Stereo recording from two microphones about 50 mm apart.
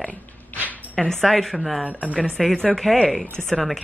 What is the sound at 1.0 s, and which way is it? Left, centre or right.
Speech, centre.